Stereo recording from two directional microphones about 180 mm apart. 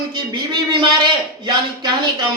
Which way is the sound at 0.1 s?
25° right (ahead or behind).